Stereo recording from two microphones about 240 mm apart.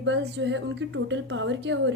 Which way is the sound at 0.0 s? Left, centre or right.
Right.